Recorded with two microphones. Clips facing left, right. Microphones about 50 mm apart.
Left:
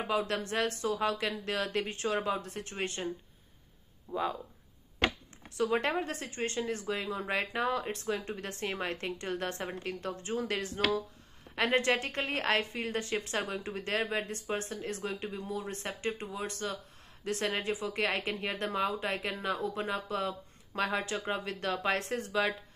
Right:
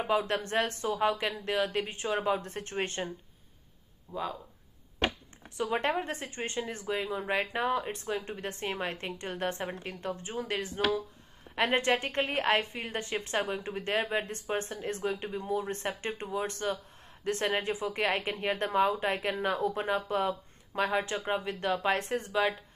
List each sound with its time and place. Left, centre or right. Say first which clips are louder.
0.1 s speech: right 3 dB; right
2.4 s speech: right 3 dB; right
4.1 s speech: left 2 dB; centre
5.7 s a woman's voice: right 3 dB; right
22.3 s speech: right 2 dB; centre